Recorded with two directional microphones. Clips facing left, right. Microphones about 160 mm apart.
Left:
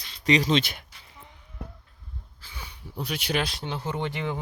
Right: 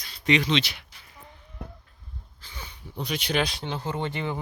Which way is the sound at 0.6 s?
50° left (ahead or behind).